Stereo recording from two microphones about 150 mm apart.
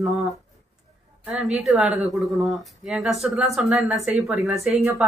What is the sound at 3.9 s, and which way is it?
Speech, 45° right (ahead or behind).